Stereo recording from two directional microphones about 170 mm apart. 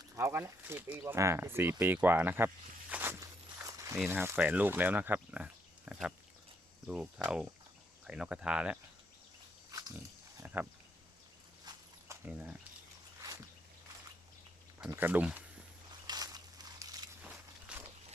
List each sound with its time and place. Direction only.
0.0 s speech: 15° right (ahead or behind)
2.9 s walk: 10° right (ahead or behind)
3.9 s speech: 5° right (ahead or behind)
9.7 s dog: 20° right (ahead or behind)
10.4 s speech: 10° right (ahead or behind)
11.6 s horse: 20° right (ahead or behind)
12.2 s speech: 10° right (ahead or behind)
14.8 s speech: 10° right (ahead or behind)
16.0 s a sound: 25° right (ahead or behind)
17.2 s walk: 10° right (ahead or behind)